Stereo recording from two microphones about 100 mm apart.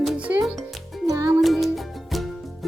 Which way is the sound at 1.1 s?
30° right (ahead or behind).